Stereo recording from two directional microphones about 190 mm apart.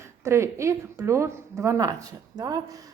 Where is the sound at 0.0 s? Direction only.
15° right (ahead or behind).